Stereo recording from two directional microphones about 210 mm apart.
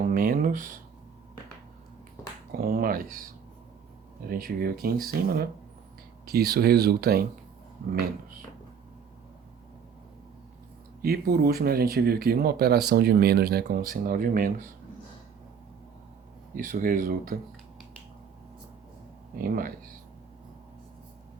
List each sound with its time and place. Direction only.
0.1 s a sound: 40° right (ahead or behind)
2.6 s speech: 45° right (ahead or behind)
4.3 s speech: 45° right (ahead or behind)
11.0 s speech: 45° right (ahead or behind)
16.6 s speech: 40° right (ahead or behind)
19.4 s speech: 40° right (ahead or behind)